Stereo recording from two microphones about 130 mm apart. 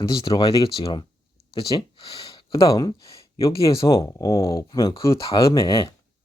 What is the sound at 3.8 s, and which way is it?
Speech, 40° left (ahead or behind).